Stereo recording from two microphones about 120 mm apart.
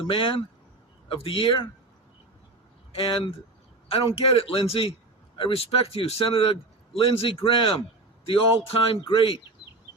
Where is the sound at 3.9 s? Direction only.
55° left (ahead or behind).